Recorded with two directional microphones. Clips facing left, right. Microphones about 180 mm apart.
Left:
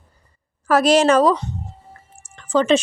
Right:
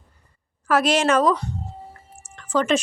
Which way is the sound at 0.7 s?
35° left (ahead or behind).